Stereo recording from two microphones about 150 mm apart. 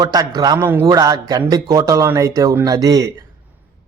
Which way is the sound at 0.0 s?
25° right (ahead or behind).